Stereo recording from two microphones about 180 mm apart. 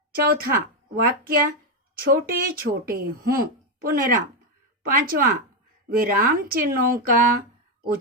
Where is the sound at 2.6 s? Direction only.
55° right (ahead or behind).